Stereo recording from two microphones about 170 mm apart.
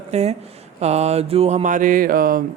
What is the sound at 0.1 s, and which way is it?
A woman's voice, 40° right (ahead or behind).